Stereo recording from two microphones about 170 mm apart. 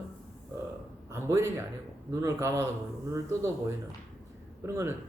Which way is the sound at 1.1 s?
15° right (ahead or behind).